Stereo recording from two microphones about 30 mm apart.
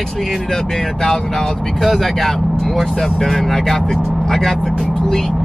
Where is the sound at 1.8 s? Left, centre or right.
Centre.